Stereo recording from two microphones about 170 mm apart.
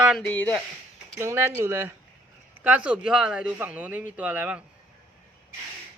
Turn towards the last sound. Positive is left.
turn(degrees=-10)  # may be behind; listen again after turning